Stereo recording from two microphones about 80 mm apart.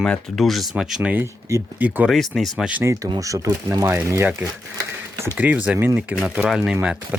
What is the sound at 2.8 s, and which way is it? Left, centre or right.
Speech, right.